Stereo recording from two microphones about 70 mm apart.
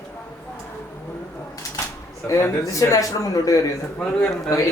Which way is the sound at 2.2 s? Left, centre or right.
Left.